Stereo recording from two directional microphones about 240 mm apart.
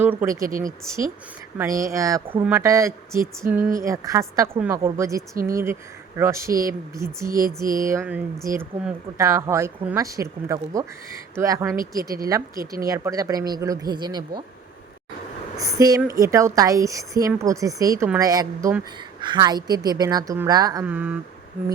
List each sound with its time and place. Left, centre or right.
0.0 s a woman's voice: centre
0.4 s speech: right
1.5 s a woman's voice: centre
6.5 s speech: right
6.9 s a woman's voice: centre
15.5 s a woman's voice: centre